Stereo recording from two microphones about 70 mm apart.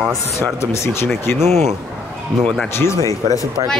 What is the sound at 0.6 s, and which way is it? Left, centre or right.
Speech, left.